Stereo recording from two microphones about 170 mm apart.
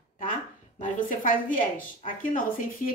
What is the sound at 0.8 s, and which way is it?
A woman's voice, 50° left (ahead or behind).